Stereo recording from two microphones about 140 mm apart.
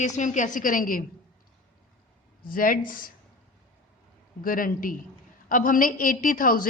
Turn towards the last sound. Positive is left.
turn(degrees=75)  # may be behind; listen again after turning